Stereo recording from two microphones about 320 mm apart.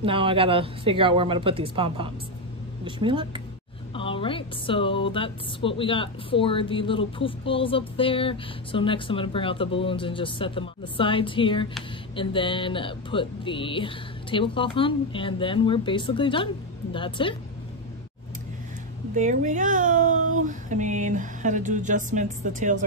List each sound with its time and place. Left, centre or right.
0.0 s speech: centre
3.9 s a woman's voice: centre
19.1 s speech: right